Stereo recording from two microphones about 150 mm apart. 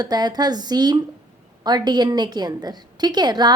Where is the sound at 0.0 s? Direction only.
25° right (ahead or behind).